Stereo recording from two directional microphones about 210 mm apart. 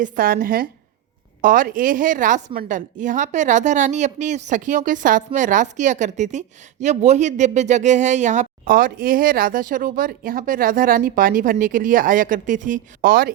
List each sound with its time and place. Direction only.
0.0 s a woman's voice: 45° right (ahead or behind)